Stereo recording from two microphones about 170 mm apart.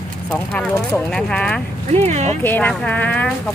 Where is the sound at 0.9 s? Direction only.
5° left (ahead or behind).